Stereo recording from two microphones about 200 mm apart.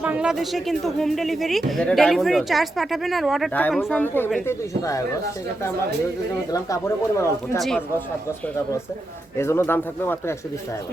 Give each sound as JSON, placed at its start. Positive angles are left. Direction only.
{"t": 0.0, "sound": "speech", "side_deg": -5}
{"t": 4.0, "sound": "speech", "side_deg": 10}
{"t": 6.5, "sound": "speech", "side_deg": 15}
{"t": 7.6, "sound": "speech", "side_deg": 0}
{"t": 9.4, "sound": "speech", "side_deg": 10}